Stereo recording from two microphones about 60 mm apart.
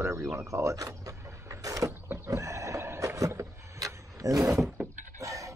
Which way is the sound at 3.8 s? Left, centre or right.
Right.